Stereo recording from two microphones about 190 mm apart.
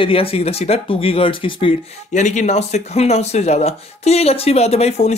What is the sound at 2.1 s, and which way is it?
Speech, 40° left (ahead or behind).